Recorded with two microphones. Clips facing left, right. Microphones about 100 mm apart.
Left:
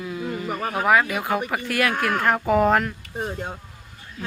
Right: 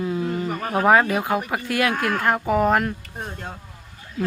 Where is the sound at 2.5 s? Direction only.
5° right (ahead or behind).